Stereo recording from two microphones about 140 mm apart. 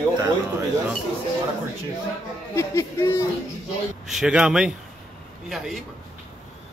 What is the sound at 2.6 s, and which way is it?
Speech, 20° left (ahead or behind).